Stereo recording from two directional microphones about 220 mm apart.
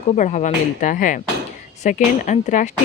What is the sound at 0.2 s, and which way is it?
Speech, 30° left (ahead or behind).